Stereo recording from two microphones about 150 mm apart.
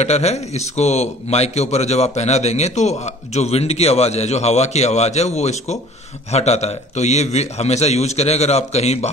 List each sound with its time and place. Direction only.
0.0 s a man's voice: 45° left (ahead or behind)